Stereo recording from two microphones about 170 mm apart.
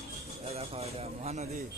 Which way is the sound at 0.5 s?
35° right (ahead or behind).